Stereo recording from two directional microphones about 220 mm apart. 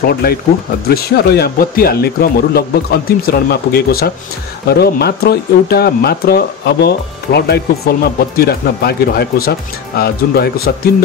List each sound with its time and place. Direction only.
0.0 s speech: 45° left (ahead or behind)